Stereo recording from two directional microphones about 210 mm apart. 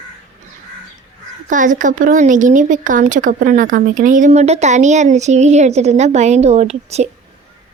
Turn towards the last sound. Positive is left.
turn(degrees=-30)  # may be behind; listen again after turning